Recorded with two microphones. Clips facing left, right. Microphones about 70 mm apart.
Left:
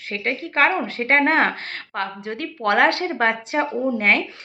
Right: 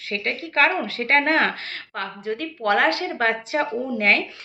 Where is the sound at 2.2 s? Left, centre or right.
Left.